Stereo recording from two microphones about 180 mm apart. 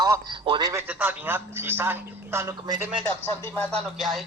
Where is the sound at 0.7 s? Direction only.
10° right (ahead or behind).